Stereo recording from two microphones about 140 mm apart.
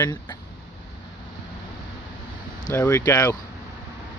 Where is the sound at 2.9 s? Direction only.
25° left (ahead or behind).